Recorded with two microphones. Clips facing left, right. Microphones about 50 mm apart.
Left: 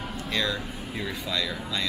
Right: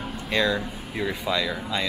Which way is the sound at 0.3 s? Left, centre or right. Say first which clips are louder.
Right 6 dB; right.